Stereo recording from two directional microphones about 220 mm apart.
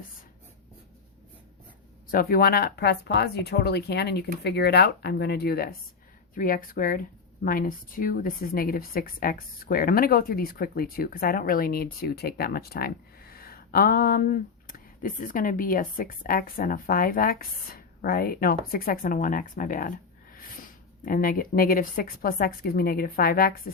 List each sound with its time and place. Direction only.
2.0 s speech: 40° left (ahead or behind)